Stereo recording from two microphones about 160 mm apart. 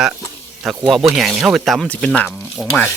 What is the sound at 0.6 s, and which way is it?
Speech, centre (ahead or behind).